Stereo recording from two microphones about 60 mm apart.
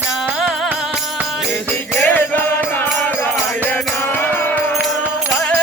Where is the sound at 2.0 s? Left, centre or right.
Left.